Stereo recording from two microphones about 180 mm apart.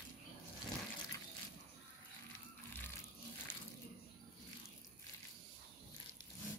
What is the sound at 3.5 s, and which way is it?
Water, 15° left (ahead or behind).